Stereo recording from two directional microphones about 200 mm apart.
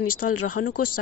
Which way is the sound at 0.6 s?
50° left (ahead or behind).